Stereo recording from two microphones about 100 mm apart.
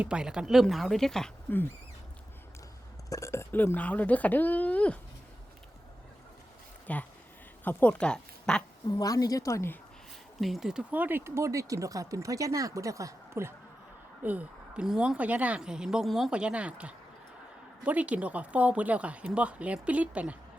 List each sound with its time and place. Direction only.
0.0 s a woman's voice: 10° right (ahead or behind)
1.5 s speech: 20° left (ahead or behind)
3.1 s speech: 30° left (ahead or behind); by 4.9 s 15° left (ahead or behind)
6.9 s speech: 15° left (ahead or behind)
7.9 s speech: 10° left (ahead or behind)
8.9 s a woman's voice: 40° left (ahead or behind)
10.4 s speech: 5° right (ahead or behind); by 13.5 s 30° right (ahead or behind)
14.2 s speech: 15° right (ahead or behind)